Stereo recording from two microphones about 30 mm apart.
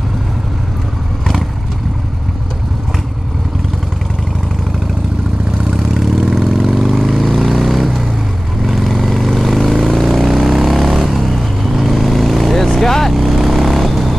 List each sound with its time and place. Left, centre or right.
5.8 s vehicle: centre
10.3 s vehicle: centre